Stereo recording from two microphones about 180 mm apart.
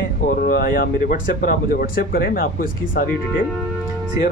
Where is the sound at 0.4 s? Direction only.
55° left (ahead or behind).